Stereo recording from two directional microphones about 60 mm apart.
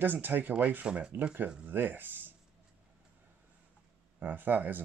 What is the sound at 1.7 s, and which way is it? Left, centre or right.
Speech, right.